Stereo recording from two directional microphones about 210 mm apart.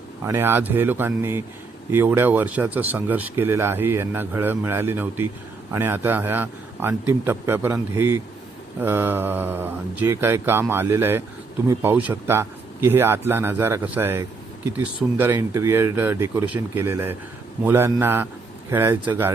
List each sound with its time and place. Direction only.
0.3 s speech: 10° right (ahead or behind)